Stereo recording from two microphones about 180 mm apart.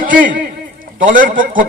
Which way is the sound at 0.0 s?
50° right (ahead or behind).